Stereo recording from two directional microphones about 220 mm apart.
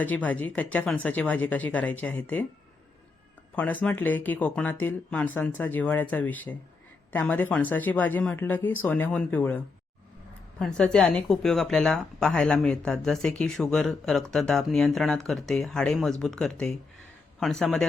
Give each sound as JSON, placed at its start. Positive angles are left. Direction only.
{"t": 0.0, "sound": "speech", "side_deg": 5}
{"t": 3.5, "sound": "speech", "side_deg": 5}
{"t": 10.8, "sound": "speech", "side_deg": 5}